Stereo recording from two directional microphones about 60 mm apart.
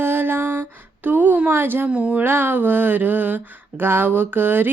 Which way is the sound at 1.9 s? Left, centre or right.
Right.